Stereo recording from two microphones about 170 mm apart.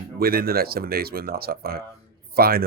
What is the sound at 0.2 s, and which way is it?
Speech, 65° right (ahead or behind).